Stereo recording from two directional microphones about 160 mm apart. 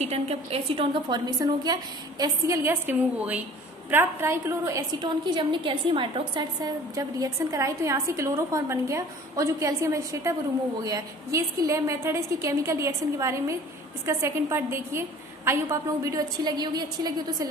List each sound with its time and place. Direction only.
0.0 s a woman's voice: 40° right (ahead or behind); by 17.5 s 25° right (ahead or behind)